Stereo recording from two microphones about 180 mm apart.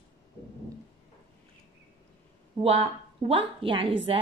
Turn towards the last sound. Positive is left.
turn(degrees=-30)  # may be behind; listen again after turning